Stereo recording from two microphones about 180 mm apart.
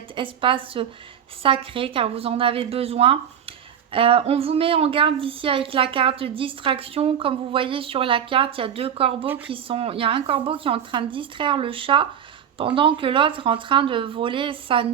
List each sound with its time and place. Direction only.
0.2 s a woman's voice: 30° right (ahead or behind)
9.2 s speech: 10° right (ahead or behind)
9.5 s speech: 30° right (ahead or behind)